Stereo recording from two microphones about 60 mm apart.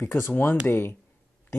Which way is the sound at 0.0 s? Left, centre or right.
Left.